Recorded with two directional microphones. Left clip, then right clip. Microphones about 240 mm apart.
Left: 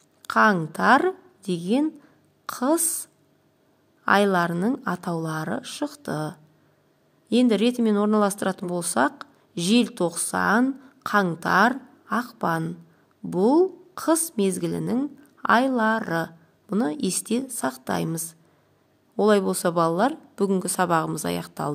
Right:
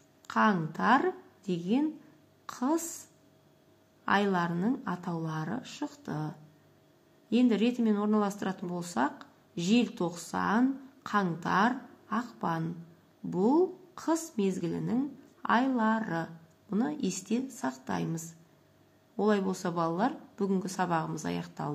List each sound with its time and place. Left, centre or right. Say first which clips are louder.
0.2 s a woman's voice: left 8 dB; left
4.0 s speech: left 8 dB; left